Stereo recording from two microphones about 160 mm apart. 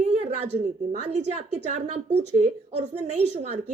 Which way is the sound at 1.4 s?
45° right (ahead or behind).